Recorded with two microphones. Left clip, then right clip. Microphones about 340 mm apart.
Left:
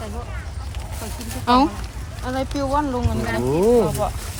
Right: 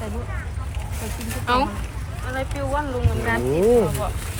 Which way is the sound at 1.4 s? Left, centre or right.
Centre.